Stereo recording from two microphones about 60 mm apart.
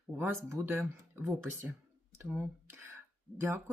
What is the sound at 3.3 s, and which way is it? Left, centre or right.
Speech, right.